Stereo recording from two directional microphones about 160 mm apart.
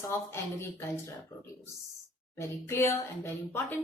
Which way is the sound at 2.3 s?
15° left (ahead or behind).